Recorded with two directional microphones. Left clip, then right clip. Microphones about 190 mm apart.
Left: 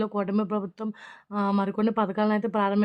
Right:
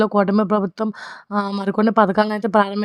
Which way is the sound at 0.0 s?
45° right (ahead or behind).